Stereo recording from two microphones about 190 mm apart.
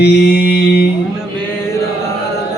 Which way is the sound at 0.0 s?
60° left (ahead or behind).